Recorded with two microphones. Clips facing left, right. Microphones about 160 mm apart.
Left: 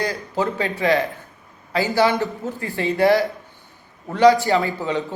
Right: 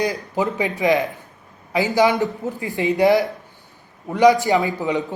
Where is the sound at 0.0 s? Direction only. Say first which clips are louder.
Right 1 dB; 20° right (ahead or behind).